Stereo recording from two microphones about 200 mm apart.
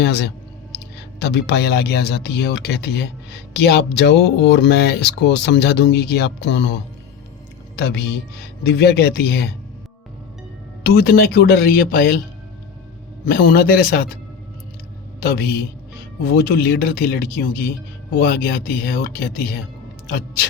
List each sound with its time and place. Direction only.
0.0 s speech: 55° left (ahead or behind)
0.7 s a sound: 55° left (ahead or behind)
1.2 s speech: 55° left (ahead or behind)
7.8 s speech: 55° left (ahead or behind)
10.8 s speech: 50° left (ahead or behind)
13.2 s speech: 50° left (ahead or behind)
15.2 s speech: 50° left (ahead or behind)